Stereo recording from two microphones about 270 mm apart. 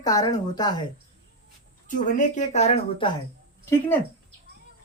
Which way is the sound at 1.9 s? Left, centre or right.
Left.